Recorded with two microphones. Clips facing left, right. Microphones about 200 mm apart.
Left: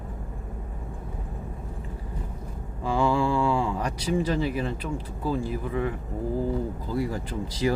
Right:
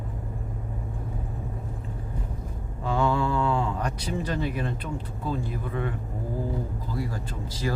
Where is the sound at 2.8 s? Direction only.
10° left (ahead or behind).